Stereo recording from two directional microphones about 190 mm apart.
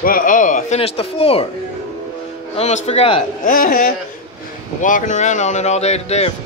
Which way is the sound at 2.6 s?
35° left (ahead or behind).